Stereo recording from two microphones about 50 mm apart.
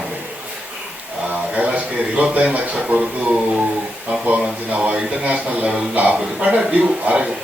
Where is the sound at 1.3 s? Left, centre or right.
Right.